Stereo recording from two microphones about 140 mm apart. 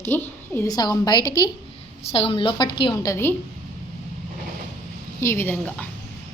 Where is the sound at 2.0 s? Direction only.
45° left (ahead or behind).